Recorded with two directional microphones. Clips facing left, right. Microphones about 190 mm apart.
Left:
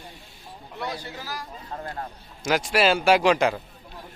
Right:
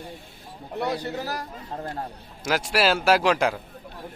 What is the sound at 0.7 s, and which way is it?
Speech, 60° right (ahead or behind).